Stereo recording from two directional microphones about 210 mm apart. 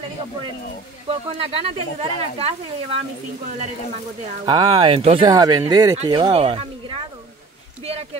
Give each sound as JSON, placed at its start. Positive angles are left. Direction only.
{"t": 1.0, "sound": "speech", "side_deg": -25}
{"t": 4.5, "sound": "speech", "side_deg": -20}
{"t": 7.8, "sound": "speech", "side_deg": -30}